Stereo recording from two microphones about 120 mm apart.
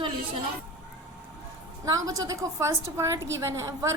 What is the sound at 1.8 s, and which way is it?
A woman's voice, 30° right (ahead or behind).